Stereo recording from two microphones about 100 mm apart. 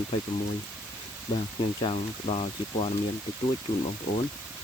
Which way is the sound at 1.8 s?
65° left (ahead or behind).